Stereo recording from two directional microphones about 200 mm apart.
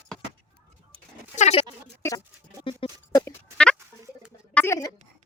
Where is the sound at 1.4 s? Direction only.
35° left (ahead or behind).